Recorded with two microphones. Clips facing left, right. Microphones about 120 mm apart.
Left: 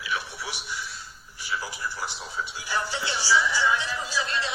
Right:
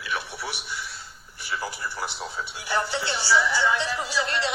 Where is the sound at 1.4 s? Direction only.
55° right (ahead or behind); by 4.5 s 70° right (ahead or behind).